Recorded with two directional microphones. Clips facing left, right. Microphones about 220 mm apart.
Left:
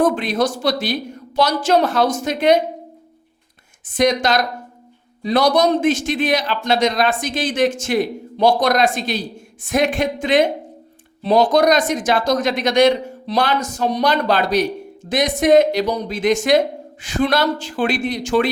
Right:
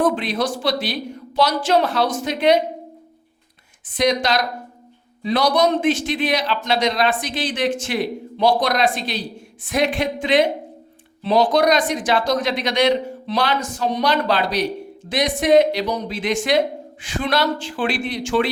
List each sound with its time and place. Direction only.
0.0 s a man's voice: 45° left (ahead or behind)
3.8 s a man's voice: 45° left (ahead or behind)